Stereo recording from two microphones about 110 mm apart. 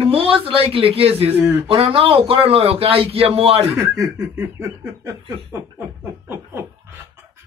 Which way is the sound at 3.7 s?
25° right (ahead or behind).